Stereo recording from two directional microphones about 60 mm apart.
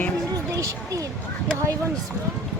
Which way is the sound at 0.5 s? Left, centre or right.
Right.